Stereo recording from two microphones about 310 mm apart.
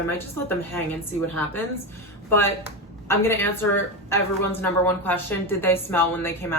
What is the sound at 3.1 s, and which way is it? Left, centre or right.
A woman's voice, centre.